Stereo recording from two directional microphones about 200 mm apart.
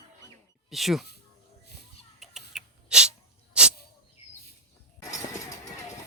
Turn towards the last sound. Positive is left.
turn(degrees=15)  # may be behind; listen again after turning